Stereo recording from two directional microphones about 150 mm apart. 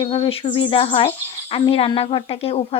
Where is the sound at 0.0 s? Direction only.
35° left (ahead or behind).